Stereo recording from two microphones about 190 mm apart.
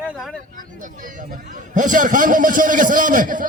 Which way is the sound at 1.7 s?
45° right (ahead or behind).